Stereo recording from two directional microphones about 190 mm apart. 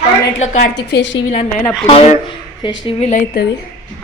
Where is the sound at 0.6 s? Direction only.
65° left (ahead or behind).